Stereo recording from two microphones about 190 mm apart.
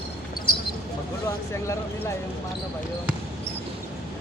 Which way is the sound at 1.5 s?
15° left (ahead or behind).